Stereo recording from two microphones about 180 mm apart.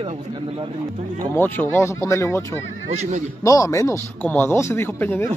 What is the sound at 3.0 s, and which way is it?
Speech, 40° right (ahead or behind).